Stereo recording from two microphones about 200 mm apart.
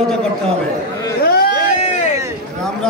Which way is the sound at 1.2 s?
50° left (ahead or behind).